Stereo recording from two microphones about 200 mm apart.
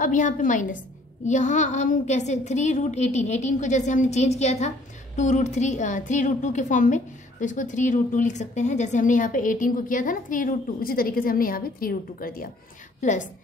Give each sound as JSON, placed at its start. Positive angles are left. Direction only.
{"t": 0.0, "sound": "a woman's voice", "side_deg": 40}